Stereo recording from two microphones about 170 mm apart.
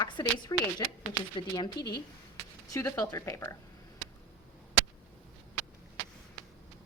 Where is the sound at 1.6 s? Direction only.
25° left (ahead or behind).